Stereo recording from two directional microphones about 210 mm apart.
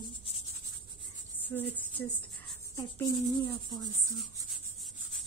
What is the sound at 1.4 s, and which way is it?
Speech, 10° left (ahead or behind).